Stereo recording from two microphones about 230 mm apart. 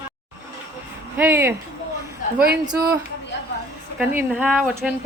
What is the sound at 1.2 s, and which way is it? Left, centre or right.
Speech, centre.